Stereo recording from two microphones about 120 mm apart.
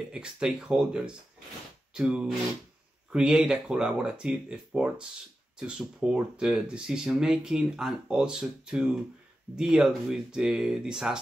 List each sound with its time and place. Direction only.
0.1 s speech: 5° right (ahead or behind)